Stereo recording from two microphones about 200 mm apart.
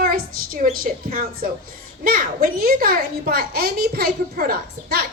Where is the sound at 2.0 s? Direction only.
45° right (ahead or behind).